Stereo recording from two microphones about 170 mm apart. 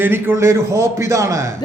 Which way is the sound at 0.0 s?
10° right (ahead or behind).